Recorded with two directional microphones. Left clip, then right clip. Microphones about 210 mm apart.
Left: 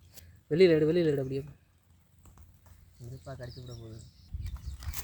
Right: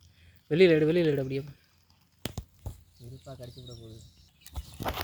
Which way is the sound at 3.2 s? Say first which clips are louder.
Left 1 dB; centre (ahead or behind).